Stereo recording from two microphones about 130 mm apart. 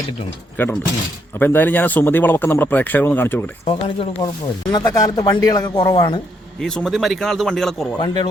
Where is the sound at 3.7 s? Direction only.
45° left (ahead or behind).